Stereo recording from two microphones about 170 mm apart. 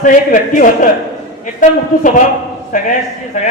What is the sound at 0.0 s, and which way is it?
A man's voice, 50° left (ahead or behind).